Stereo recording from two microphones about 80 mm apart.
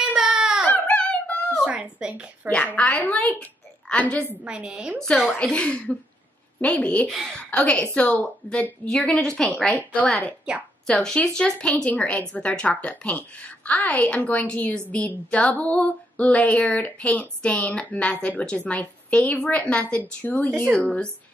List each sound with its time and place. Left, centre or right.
0.0 s baby cry: centre
0.7 s a sound: centre
1.6 s a sound: centre
2.5 s speech: centre
4.5 s a woman's voice: centre
5.4 s speech: centre
10.5 s a woman's voice: centre
10.9 s a woman's voice: centre